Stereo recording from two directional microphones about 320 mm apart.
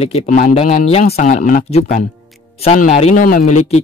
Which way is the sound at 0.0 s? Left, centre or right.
Left.